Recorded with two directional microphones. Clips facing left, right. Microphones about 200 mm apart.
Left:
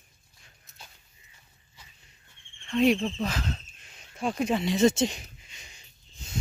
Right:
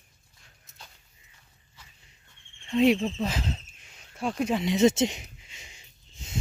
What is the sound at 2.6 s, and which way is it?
Speech, 25° right (ahead or behind).